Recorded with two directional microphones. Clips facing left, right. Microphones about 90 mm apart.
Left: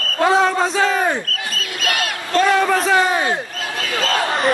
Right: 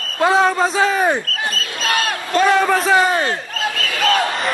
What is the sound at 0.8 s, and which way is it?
Speech, 10° right (ahead or behind).